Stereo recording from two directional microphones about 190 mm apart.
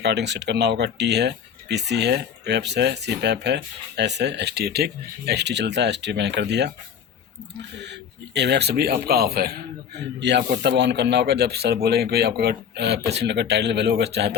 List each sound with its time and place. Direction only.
0.0 s speech: 65° right (ahead or behind)
8.3 s speech: 65° right (ahead or behind)